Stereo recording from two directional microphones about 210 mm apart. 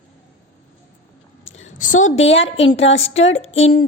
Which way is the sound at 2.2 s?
65° left (ahead or behind).